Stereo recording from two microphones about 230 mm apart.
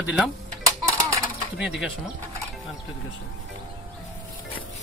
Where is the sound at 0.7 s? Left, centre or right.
Centre.